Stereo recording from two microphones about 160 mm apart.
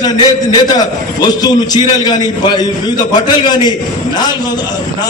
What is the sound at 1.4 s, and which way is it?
Speech, 25° left (ahead or behind).